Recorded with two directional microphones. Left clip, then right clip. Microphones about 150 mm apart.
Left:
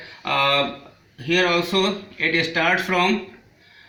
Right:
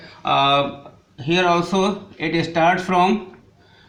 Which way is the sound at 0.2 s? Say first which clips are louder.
Right 3 dB; 40° right (ahead or behind).